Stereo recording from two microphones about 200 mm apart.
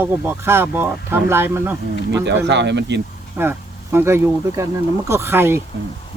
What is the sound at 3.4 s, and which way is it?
Speech, 10° right (ahead or behind).